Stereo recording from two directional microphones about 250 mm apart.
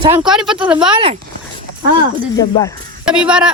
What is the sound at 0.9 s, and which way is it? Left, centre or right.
Speech, centre.